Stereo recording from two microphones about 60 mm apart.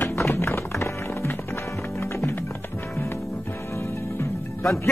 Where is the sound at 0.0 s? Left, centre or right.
Left.